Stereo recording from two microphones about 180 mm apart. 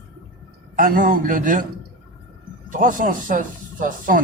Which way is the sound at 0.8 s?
50° right (ahead or behind).